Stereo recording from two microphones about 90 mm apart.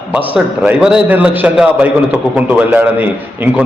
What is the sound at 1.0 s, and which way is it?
A man's voice, 20° right (ahead or behind).